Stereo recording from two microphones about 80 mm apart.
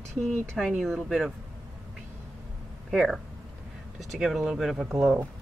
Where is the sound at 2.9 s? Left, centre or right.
Centre.